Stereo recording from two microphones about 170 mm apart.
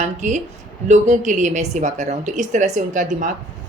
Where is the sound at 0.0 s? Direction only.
45° right (ahead or behind).